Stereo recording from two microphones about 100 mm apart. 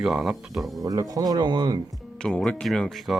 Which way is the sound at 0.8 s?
35° right (ahead or behind).